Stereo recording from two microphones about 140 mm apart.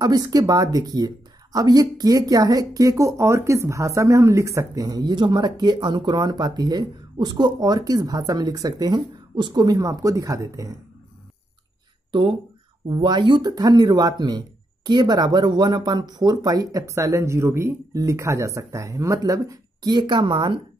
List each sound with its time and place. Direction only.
0.0 s speech: 30° right (ahead or behind)
12.1 s speech: 40° right (ahead or behind)